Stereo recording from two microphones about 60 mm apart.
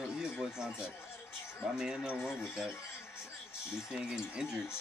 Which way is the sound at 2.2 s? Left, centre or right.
Left.